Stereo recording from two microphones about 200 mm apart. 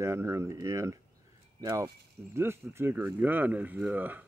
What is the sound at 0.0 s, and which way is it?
Speech, 15° right (ahead or behind).